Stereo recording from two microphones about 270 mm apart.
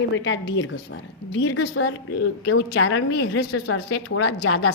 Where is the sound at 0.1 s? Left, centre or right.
Left.